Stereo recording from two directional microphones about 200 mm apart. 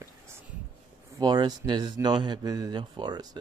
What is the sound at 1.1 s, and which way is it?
Speech, 20° right (ahead or behind).